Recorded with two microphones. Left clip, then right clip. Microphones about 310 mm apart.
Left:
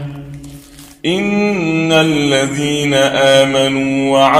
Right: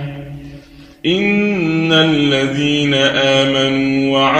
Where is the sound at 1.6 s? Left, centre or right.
Centre.